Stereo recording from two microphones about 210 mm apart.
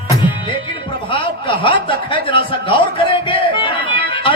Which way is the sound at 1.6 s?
25° left (ahead or behind).